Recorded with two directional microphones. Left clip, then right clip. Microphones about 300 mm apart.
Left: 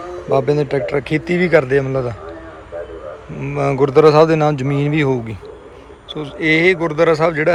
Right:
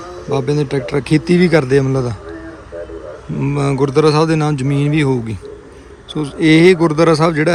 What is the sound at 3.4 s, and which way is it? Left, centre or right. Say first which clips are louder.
A man's voice: left 1 dB; centre.